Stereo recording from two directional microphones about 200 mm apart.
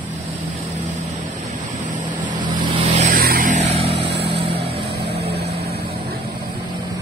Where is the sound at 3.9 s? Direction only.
60° right (ahead or behind).